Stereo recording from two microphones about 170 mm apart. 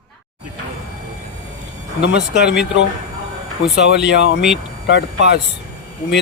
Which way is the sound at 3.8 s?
85° left.